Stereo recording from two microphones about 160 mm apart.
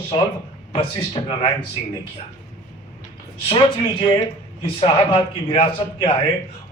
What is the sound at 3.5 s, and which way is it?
Speech, 30° left (ahead or behind).